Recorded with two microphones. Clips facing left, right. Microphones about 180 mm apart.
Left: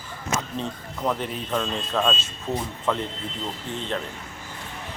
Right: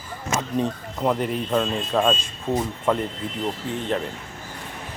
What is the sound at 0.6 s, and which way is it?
Speech, 10° right (ahead or behind).